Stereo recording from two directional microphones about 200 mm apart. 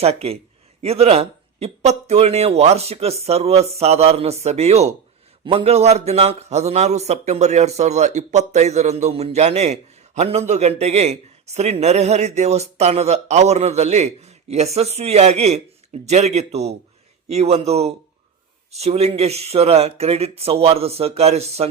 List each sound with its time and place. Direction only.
0.0 s a man's voice: 30° right (ahead or behind)